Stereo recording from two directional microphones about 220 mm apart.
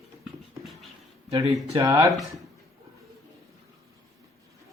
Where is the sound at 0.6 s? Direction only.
Centre (ahead or behind).